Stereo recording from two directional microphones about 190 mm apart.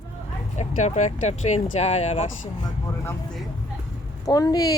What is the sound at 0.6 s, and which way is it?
Speech, 35° left (ahead or behind).